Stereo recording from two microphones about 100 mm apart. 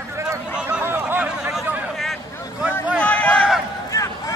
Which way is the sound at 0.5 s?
10° right (ahead or behind).